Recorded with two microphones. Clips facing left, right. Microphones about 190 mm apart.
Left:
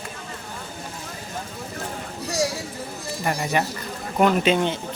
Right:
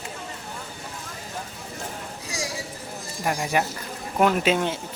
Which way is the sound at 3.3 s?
5° right (ahead or behind).